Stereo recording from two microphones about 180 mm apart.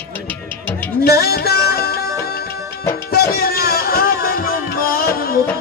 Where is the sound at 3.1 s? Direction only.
55° left (ahead or behind).